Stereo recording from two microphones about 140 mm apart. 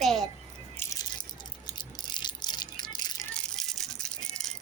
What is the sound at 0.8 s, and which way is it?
Rattle, 25° left (ahead or behind).